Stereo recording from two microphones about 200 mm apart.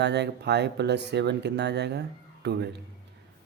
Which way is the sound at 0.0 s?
55° right (ahead or behind).